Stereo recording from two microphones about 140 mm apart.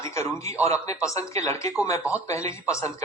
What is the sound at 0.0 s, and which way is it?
Speech, 20° left (ahead or behind).